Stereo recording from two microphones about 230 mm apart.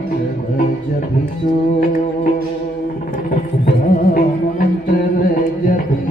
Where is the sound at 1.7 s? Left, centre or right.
Left.